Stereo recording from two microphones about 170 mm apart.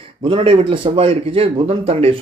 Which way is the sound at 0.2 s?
30° right (ahead or behind).